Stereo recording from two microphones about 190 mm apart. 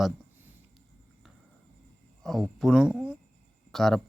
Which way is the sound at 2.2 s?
Centre (ahead or behind).